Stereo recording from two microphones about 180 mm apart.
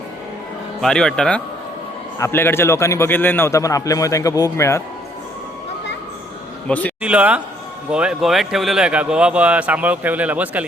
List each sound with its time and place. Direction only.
0.8 s a man's voice: 5° left (ahead or behind)
6.7 s a man's voice: 10° left (ahead or behind)
7.0 s speech: 5° right (ahead or behind)